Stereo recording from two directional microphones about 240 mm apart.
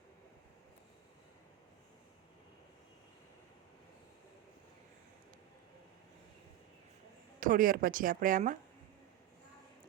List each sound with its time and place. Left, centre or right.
7.3 s speech: right